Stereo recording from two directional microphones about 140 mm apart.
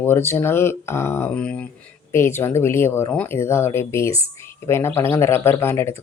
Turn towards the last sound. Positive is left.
turn(degrees=20)  # may be behind; listen again after turning